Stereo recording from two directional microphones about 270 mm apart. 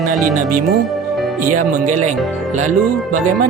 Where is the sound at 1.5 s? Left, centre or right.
Right.